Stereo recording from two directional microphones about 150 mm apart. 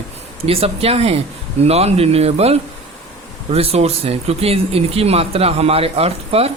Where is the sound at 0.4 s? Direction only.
40° right (ahead or behind).